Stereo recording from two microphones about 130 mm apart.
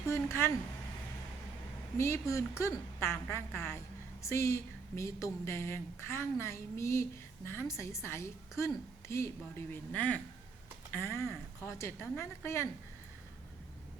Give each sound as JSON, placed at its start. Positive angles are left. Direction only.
{"t": 0.0, "sound": "speech", "side_deg": 20}
{"t": 2.0, "sound": "a woman's voice", "side_deg": 20}